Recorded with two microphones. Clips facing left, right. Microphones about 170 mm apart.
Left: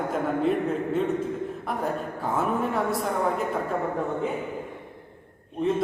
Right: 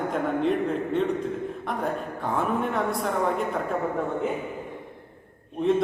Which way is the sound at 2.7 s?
Centre (ahead or behind).